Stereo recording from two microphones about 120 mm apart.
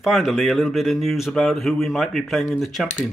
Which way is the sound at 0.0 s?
Centre (ahead or behind).